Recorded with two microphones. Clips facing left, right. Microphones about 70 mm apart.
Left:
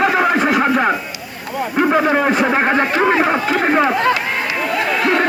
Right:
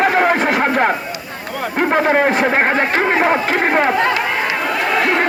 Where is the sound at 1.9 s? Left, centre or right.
Right.